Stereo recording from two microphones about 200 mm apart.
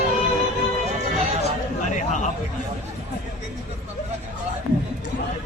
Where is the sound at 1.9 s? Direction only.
35° left (ahead or behind).